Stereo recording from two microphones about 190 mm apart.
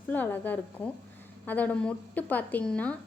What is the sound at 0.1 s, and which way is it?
A woman's voice, 10° left (ahead or behind).